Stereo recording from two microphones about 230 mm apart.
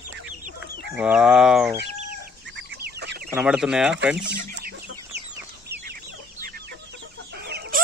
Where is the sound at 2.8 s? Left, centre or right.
Right.